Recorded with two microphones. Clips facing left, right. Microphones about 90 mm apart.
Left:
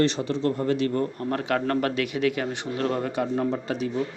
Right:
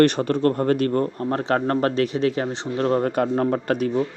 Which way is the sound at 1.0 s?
35° right (ahead or behind).